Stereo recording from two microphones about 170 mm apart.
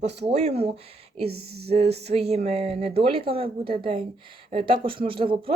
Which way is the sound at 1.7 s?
40° right (ahead or behind).